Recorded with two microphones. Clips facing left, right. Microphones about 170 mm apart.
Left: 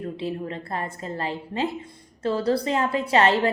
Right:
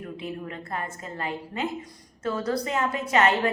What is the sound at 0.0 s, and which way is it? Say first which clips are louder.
A woman's voice: left 5 dB; 30° left (ahead or behind).